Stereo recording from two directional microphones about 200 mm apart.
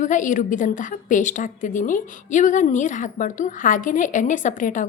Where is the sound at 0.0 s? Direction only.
40° left (ahead or behind).